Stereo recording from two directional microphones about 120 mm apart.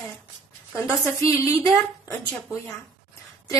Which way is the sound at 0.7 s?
25° left (ahead or behind).